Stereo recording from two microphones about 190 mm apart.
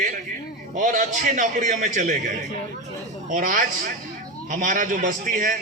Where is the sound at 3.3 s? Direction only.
45° right (ahead or behind).